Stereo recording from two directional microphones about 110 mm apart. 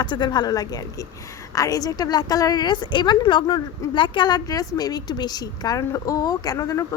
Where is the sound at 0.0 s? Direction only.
45° left (ahead or behind).